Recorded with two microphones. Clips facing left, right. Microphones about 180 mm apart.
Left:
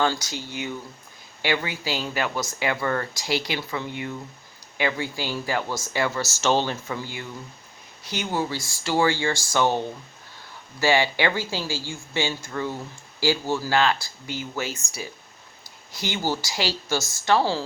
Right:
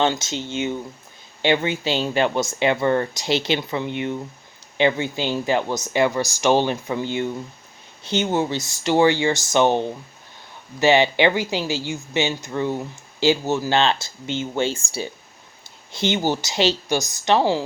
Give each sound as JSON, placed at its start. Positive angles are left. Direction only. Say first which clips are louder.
{"t": 0.0, "sound": "speech", "louder": "right 3 dB", "side_deg": -25}